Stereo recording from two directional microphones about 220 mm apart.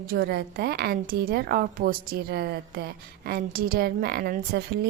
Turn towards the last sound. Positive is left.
turn(degrees=-45)  # may be behind; listen again after turning